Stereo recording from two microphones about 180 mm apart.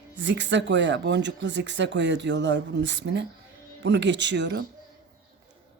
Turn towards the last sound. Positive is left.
turn(degrees=-80)